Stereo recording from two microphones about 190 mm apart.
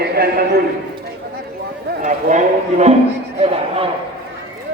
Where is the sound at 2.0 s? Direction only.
40° right (ahead or behind).